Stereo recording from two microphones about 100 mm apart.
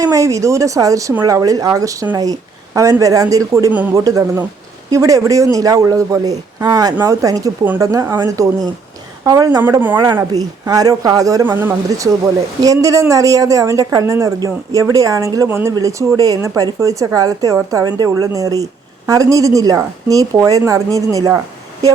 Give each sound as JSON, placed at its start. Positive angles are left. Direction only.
{"t": 0.0, "sound": "speech", "side_deg": -35}
{"t": 3.7, "sound": "speech", "side_deg": -15}
{"t": 3.9, "sound": "speech", "side_deg": -35}
{"t": 11.4, "sound": "speech", "side_deg": -20}
{"t": 11.9, "sound": "speech", "side_deg": -35}
{"t": 15.4, "sound": "speech", "side_deg": -25}